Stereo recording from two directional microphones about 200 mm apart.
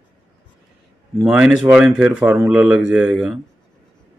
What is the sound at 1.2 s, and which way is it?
Speech, 5° right (ahead or behind).